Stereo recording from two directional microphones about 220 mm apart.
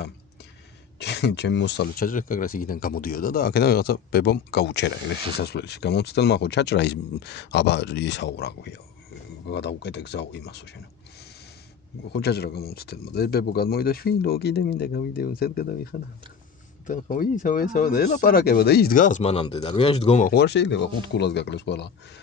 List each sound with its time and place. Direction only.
0.9 s speech: 50° left (ahead or behind)
12.1 s speech: 50° left (ahead or behind); by 20.2 s 25° left (ahead or behind)
20.2 s speech: 50° left (ahead or behind)